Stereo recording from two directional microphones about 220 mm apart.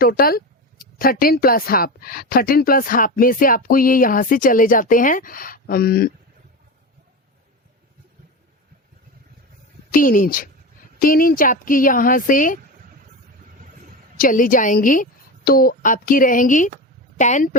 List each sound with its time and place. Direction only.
0.0 s speech: 40° left (ahead or behind)
9.9 s speech: 40° left (ahead or behind)
14.2 s speech: 40° left (ahead or behind)